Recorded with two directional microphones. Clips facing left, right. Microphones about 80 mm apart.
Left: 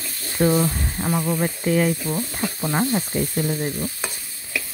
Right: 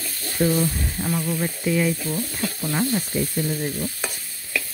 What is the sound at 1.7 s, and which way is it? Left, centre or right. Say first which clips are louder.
Stir: left 2 dB; left.